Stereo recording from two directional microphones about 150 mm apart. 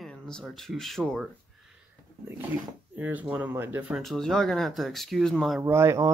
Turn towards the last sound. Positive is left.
turn(degrees=-15)  # may be behind; listen again after turning